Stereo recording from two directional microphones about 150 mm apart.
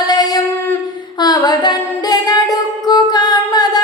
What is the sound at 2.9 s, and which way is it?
Music, 30° left (ahead or behind).